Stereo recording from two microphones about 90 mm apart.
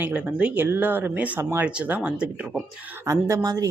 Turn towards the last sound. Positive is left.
turn(degrees=-45)  # may be behind; listen again after turning